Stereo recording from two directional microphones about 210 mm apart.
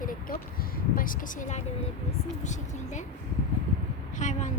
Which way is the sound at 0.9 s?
40° left (ahead or behind).